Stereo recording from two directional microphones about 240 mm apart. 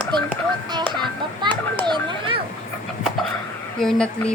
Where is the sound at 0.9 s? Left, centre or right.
Centre.